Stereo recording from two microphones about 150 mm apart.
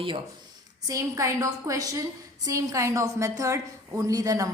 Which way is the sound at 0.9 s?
20° right (ahead or behind).